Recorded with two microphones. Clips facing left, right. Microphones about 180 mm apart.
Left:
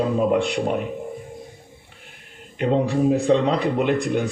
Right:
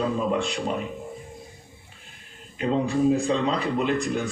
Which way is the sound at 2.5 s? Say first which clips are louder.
Left 3 dB; 65° left (ahead or behind).